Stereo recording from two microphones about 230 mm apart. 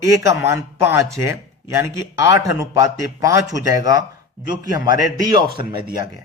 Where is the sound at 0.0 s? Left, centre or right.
Centre.